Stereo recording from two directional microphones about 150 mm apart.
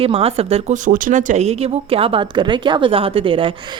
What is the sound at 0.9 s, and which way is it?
Speech, 65° right (ahead or behind).